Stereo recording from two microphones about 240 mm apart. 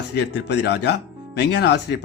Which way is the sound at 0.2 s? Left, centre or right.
Left.